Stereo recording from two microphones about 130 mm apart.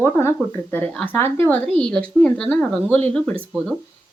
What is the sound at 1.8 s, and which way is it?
Speech, 5° left (ahead or behind).